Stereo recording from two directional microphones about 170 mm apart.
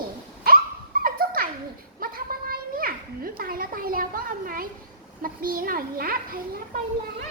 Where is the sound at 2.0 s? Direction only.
60° right (ahead or behind).